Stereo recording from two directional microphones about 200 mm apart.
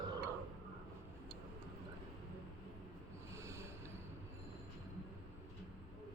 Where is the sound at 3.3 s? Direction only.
15° right (ahead or behind).